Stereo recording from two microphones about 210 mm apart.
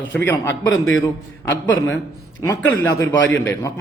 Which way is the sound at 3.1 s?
10° left (ahead or behind).